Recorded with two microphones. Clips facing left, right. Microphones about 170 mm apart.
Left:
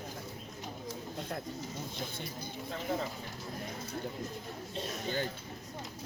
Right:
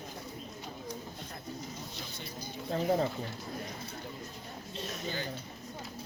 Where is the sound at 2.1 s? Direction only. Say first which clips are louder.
Left 1 dB; 55° left (ahead or behind).